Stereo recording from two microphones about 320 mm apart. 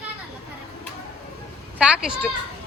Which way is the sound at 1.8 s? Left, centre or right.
Centre.